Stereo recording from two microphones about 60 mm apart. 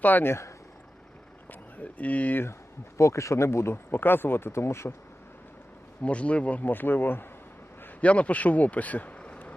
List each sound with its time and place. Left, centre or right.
0.0 s speech: left
1.8 s a man's voice: left
3.0 s speech: left
6.0 s a man's voice: left
8.0 s speech: left